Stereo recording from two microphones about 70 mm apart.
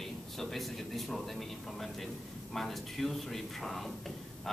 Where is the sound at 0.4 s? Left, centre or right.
Centre.